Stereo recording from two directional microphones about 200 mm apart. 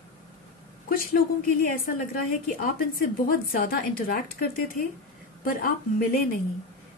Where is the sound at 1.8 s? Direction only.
45° left (ahead or behind).